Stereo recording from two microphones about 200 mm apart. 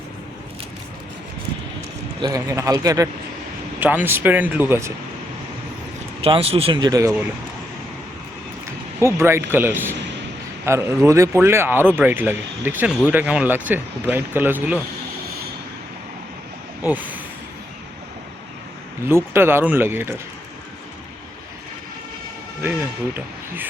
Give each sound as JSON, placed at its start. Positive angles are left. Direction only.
{"t": 2.2, "sound": "speech", "side_deg": -15}
{"t": 6.2, "sound": "speech", "side_deg": -30}
{"t": 9.0, "sound": "speech", "side_deg": -15}
{"t": 16.8, "sound": "speech", "side_deg": -10}
{"t": 19.0, "sound": "speech", "side_deg": -10}